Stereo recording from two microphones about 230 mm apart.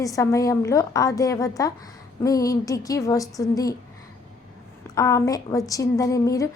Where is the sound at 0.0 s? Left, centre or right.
Centre.